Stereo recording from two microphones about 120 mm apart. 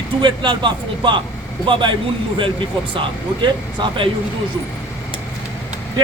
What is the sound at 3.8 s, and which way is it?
Speech, 45° right (ahead or behind).